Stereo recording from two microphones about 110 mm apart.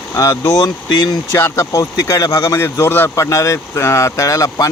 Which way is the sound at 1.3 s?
25° left (ahead or behind).